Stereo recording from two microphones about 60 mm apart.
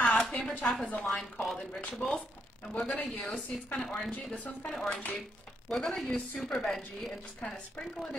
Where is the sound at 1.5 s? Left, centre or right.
Centre.